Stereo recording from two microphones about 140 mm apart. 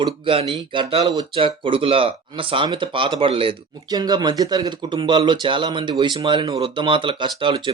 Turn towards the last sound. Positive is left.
turn(degrees=-35)  # may be behind; listen again after turning